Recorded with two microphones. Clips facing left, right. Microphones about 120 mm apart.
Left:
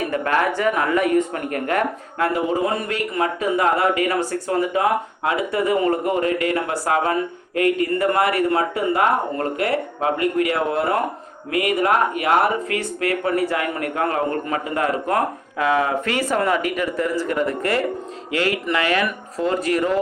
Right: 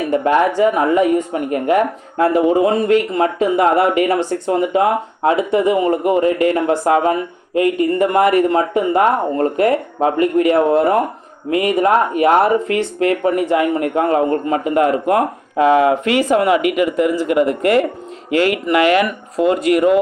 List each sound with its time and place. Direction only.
0.3 s speech: 20° right (ahead or behind)
16.1 s speech: 15° right (ahead or behind)
18.9 s speech: 20° right (ahead or behind)